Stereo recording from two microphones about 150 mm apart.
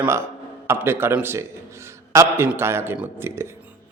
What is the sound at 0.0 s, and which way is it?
A man's voice, 15° right (ahead or behind).